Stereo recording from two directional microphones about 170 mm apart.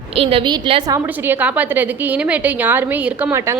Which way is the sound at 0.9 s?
10° right (ahead or behind).